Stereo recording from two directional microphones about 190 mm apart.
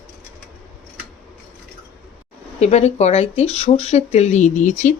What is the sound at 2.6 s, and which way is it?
Speech, 35° left (ahead or behind).